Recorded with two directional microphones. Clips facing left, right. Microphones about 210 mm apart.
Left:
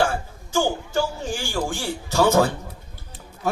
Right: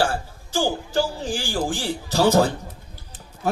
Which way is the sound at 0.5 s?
35° right (ahead or behind).